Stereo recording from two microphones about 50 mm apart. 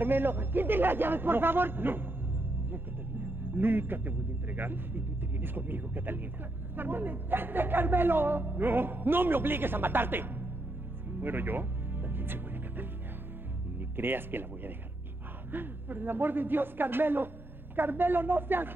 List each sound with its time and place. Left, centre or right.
0.0 s a man's voice: right
11.1 s music: right
13.7 s a man's voice: right